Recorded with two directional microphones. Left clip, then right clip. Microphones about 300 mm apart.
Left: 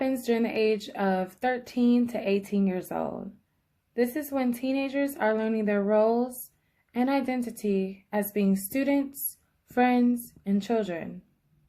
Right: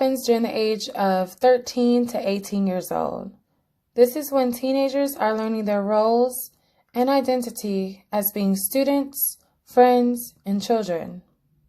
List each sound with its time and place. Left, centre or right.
0.0 s a woman's voice: centre